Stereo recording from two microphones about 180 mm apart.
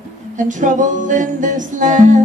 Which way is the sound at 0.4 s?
45° right (ahead or behind).